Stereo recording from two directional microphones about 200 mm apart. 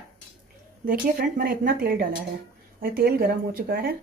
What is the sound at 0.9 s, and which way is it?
Speech, 45° right (ahead or behind).